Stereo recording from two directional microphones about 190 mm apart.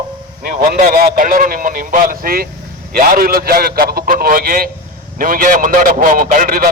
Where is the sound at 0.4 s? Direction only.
50° right (ahead or behind).